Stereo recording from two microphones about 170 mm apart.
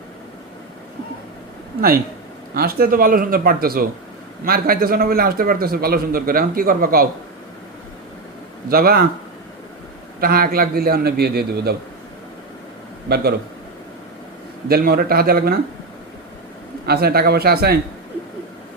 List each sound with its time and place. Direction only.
2.6 s a man's voice: 60° right (ahead or behind)
8.7 s a man's voice: 60° right (ahead or behind)
10.2 s a man's voice: 60° right (ahead or behind)
13.1 s a man's voice: 65° right (ahead or behind)
14.7 s a man's voice: 60° right (ahead or behind)
16.8 s a man's voice: 65° right (ahead or behind)